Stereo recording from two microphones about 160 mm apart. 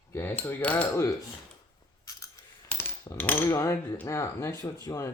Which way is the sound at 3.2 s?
10° left (ahead or behind).